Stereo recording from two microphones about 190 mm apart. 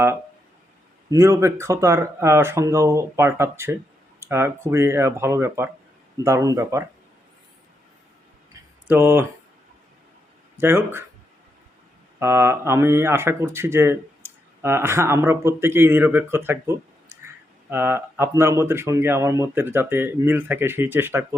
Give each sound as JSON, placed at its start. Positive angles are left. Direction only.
{"t": 1.1, "sound": "speech", "side_deg": -15}
{"t": 8.9, "sound": "speech", "side_deg": -10}
{"t": 10.6, "sound": "speech", "side_deg": -10}
{"t": 12.2, "sound": "speech", "side_deg": -15}